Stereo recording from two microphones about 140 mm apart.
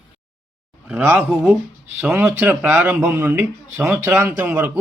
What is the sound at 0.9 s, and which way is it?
Speech, 10° right (ahead or behind).